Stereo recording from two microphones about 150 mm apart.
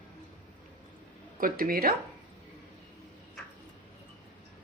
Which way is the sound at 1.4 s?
70° right (ahead or behind).